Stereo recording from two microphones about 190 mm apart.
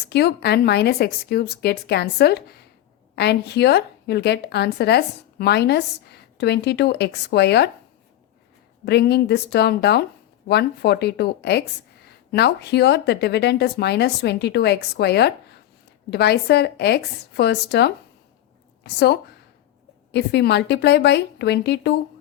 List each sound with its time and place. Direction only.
0.1 s a woman's voice: 60° left (ahead or behind)
8.8 s a woman's voice: 60° left (ahead or behind)